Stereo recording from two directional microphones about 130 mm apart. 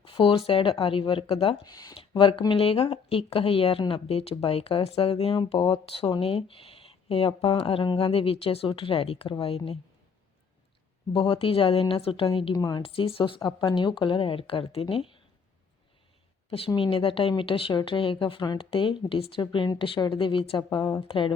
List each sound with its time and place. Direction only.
0.0 s a woman's voice: 40° left (ahead or behind)
1.7 s speech: 30° left (ahead or behind)
2.0 s a woman's voice: 45° left (ahead or behind)
11.1 s a woman's voice: 45° left (ahead or behind)
12.5 s speech: 30° left (ahead or behind)
12.8 s a woman's voice: 45° left (ahead or behind)
16.5 s a woman's voice: 45° left (ahead or behind)